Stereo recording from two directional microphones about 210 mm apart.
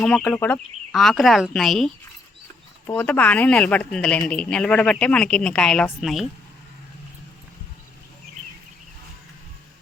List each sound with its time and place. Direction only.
0.0 s a woman's voice: 5° left (ahead or behind)